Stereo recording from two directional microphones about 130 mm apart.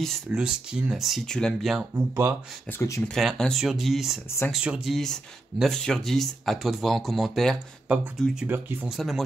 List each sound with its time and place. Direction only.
0.0 s speech: 5° right (ahead or behind)
2.0 s speech: 20° right (ahead or behind)
3.1 s speech: centre (ahead or behind)
8.5 s speech: 15° right (ahead or behind)
8.9 s speech: centre (ahead or behind)